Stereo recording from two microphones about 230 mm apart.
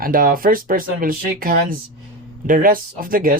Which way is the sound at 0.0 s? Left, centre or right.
Right.